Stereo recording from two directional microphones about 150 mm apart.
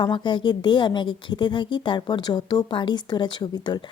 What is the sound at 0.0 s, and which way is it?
A woman's voice, 30° left (ahead or behind).